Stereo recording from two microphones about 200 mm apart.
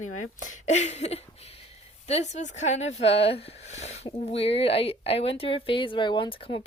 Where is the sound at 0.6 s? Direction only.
35° left (ahead or behind).